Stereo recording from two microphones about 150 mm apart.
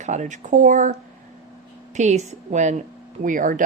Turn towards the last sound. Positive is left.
turn(degrees=-60)  # may be behind; listen again after turning